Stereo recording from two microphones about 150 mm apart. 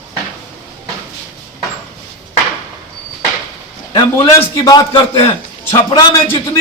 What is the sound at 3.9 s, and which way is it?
Speech, 25° left (ahead or behind).